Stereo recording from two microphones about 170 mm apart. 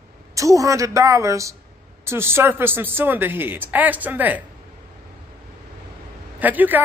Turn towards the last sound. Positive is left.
turn(degrees=-10)  # may be behind; listen again after turning